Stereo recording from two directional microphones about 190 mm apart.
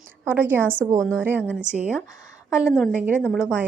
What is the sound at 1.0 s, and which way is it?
Speech, 5° left (ahead or behind).